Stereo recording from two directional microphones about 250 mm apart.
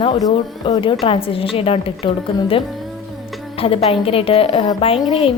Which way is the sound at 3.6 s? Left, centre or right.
Left.